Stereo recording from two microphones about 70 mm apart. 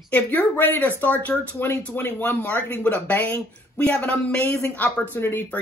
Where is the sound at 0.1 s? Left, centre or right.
Left.